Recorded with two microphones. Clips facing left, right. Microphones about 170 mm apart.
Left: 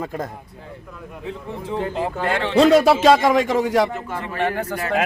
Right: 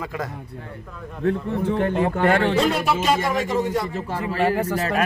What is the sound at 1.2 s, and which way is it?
A man's voice, 60° right (ahead or behind).